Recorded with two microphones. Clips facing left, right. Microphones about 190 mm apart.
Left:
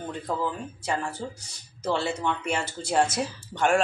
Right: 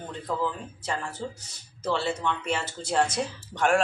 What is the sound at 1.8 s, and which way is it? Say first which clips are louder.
Speech: left 1 dB; 15° left (ahead or behind).